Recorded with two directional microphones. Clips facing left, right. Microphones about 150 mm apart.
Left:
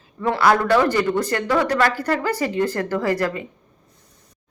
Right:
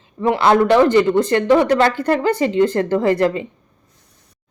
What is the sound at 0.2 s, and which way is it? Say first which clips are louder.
A woman's voice: right 4 dB; 20° right (ahead or behind).